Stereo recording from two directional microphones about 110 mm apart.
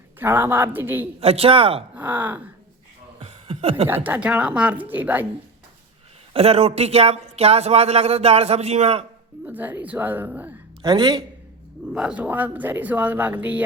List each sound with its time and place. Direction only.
0.2 s speech: 20° right (ahead or behind)
1.2 s a man's voice: 65° right (ahead or behind)
2.0 s speech: 15° right (ahead or behind)
3.2 s a sound: 60° right (ahead or behind)
3.8 s speech: 15° right (ahead or behind)
6.3 s a man's voice: 65° right (ahead or behind)
9.5 s speech: 15° right (ahead or behind)
10.8 s speech: 40° right (ahead or behind)
11.9 s speech: 10° right (ahead or behind)